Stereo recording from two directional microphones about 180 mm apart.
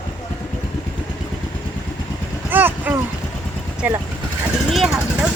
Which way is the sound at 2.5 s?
10° right (ahead or behind).